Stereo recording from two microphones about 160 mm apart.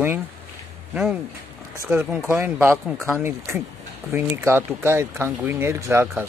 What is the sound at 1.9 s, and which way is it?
Speech, 15° right (ahead or behind).